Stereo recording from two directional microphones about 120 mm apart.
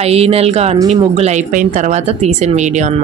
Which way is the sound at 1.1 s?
75° right (ahead or behind).